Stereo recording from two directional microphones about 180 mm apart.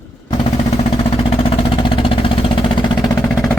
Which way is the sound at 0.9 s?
30° left (ahead or behind).